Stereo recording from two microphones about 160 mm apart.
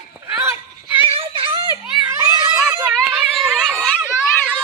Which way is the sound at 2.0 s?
20° right (ahead or behind).